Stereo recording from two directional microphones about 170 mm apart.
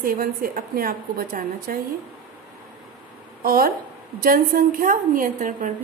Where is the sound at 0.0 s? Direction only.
60° right (ahead or behind).